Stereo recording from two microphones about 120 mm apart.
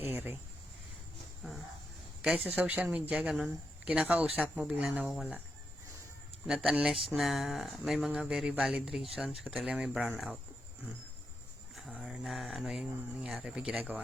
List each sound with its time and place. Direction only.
0.0 s speech: 15° right (ahead or behind)
2.2 s speech: 10° right (ahead or behind)
6.5 s speech: 5° right (ahead or behind)
11.7 s a sound: 5° left (ahead or behind)
12.1 s speech: 5° right (ahead or behind)